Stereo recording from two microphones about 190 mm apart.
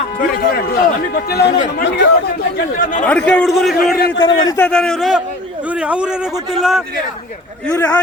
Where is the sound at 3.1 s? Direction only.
5° left (ahead or behind).